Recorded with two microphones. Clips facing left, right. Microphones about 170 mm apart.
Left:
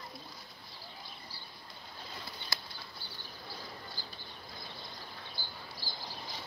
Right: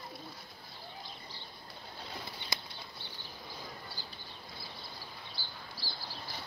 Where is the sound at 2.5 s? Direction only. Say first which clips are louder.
Right 1 dB; 20° right (ahead or behind).